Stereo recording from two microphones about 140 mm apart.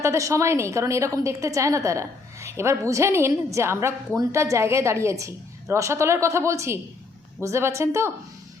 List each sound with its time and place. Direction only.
0.0 s a woman's voice: 20° right (ahead or behind)